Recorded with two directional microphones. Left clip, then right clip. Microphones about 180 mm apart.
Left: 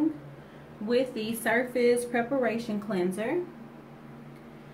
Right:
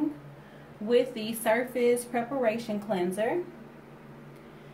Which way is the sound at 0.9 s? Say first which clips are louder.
Right 2 dB; 10° right (ahead or behind).